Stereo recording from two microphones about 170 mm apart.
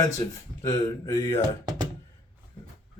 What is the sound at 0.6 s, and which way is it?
Speech, 15° left (ahead or behind).